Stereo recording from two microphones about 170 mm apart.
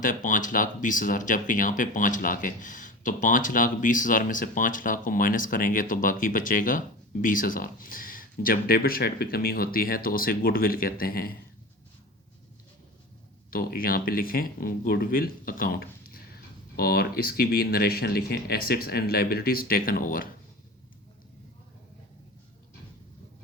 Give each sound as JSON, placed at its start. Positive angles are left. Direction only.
{"t": 0.0, "sound": "speech", "side_deg": 50}
{"t": 13.5, "sound": "speech", "side_deg": 60}